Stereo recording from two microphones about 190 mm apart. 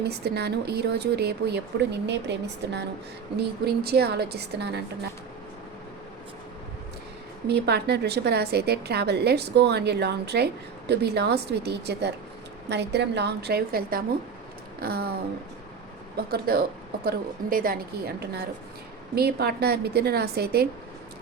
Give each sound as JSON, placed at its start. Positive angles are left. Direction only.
{"t": 0.0, "sound": "a woman's voice", "side_deg": -60}
{"t": 7.4, "sound": "a woman's voice", "side_deg": -60}
{"t": 14.8, "sound": "a sound", "side_deg": -55}
{"t": 16.1, "sound": "a woman's voice", "side_deg": -55}